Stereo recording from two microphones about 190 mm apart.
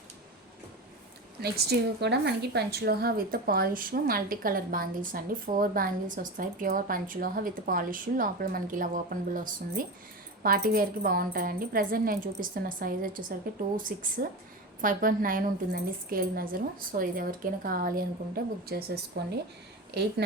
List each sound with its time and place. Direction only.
1.4 s a woman's voice: 55° right (ahead or behind)